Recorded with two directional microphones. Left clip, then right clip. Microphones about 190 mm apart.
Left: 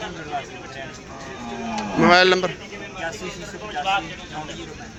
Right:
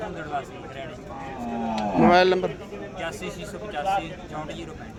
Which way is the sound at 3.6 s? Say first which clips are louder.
Left 3 dB; 35° right (ahead or behind).